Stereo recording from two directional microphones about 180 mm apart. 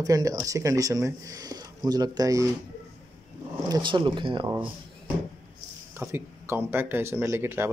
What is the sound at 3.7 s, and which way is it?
Speech, 25° right (ahead or behind).